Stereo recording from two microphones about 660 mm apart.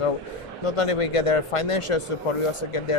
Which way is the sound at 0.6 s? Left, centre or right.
Left.